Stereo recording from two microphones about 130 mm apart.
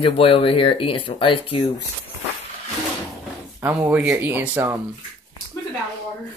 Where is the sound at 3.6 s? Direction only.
15° right (ahead or behind).